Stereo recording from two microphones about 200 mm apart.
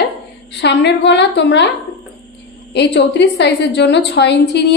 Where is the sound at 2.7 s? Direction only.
60° left (ahead or behind).